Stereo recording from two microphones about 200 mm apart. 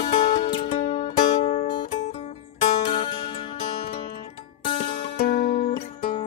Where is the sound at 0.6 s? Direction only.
35° left (ahead or behind).